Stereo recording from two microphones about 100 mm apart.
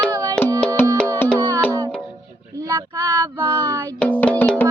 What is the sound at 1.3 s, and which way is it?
Music, 35° right (ahead or behind).